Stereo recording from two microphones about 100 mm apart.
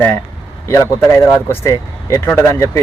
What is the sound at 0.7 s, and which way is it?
Speech, 25° left (ahead or behind).